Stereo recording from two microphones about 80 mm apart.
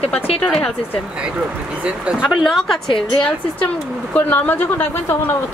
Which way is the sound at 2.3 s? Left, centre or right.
Centre.